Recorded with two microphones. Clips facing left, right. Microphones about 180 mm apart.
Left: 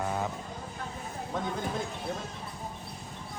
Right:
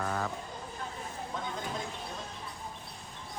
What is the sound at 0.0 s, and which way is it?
Vehicle, 15° left (ahead or behind).